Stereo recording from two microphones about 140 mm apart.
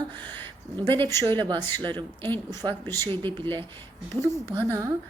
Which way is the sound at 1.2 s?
30° right (ahead or behind).